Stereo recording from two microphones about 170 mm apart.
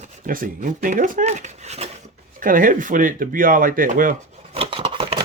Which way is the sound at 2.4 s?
55° right (ahead or behind).